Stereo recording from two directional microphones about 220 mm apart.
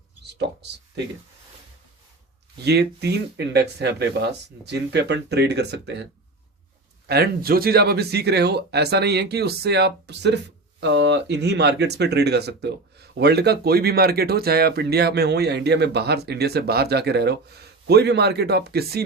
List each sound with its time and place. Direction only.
0.3 s speech: 50° right (ahead or behind)
2.6 s speech: 50° right (ahead or behind)
7.1 s speech: 45° right (ahead or behind)